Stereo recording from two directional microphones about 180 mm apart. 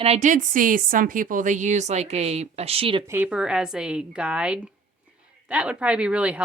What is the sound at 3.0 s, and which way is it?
A woman's voice, 10° right (ahead or behind).